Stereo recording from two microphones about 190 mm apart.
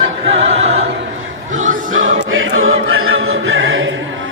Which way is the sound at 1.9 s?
90° right.